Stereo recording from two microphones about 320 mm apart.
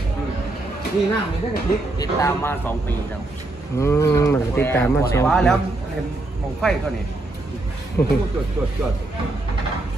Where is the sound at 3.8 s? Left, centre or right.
Centre.